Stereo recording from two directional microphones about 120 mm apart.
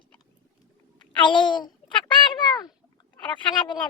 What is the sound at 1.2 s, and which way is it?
Speech, 40° left (ahead or behind).